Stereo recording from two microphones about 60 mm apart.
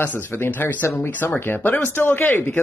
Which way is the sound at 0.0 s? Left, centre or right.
Left.